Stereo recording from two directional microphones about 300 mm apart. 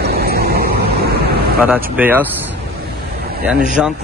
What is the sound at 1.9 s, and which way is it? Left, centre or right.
Speech, centre.